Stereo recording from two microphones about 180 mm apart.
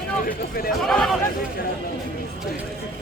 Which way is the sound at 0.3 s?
55° left (ahead or behind).